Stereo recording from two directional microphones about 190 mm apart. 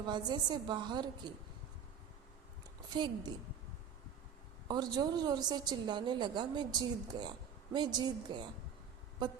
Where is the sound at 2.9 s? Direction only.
25° right (ahead or behind).